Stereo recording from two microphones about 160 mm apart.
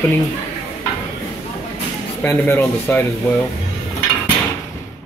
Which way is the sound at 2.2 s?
15° left (ahead or behind).